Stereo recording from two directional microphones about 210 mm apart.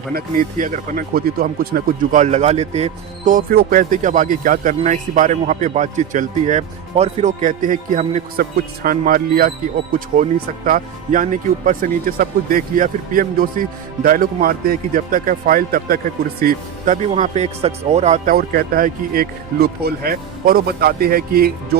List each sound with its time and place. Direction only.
0.1 s speech: 45° right (ahead or behind)
10.7 s speech: 40° right (ahead or behind)